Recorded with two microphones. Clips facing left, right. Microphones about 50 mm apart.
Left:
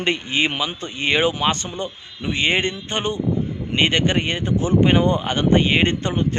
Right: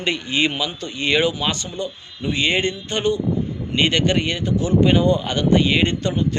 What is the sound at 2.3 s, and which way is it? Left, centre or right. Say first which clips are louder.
Speech: even; left.